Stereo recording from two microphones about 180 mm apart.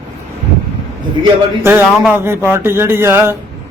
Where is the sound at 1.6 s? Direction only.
10° right (ahead or behind).